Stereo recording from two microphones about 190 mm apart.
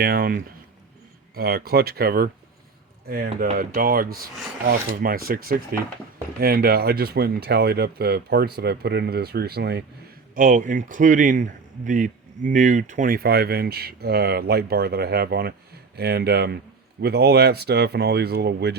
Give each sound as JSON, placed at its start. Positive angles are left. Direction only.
{"t": 0.0, "sound": "speech", "side_deg": -50}
{"t": 10.3, "sound": "speech", "side_deg": -40}